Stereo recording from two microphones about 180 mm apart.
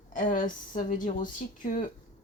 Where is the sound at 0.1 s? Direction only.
45° left (ahead or behind).